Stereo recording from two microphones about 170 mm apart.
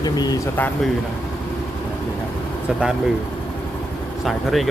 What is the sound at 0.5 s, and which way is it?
Speech, 10° left (ahead or behind).